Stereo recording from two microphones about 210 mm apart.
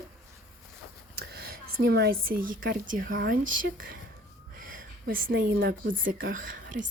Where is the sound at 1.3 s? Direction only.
45° right (ahead or behind).